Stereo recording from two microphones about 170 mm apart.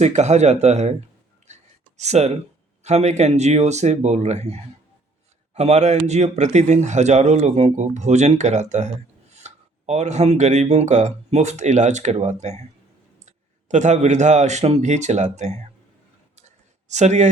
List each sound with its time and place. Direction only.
0.0 s speech: 40° right (ahead or behind)
1.5 s a sound: 40° right (ahead or behind)
2.0 s a man's voice: 40° right (ahead or behind)
16.9 s a man's voice: 40° right (ahead or behind)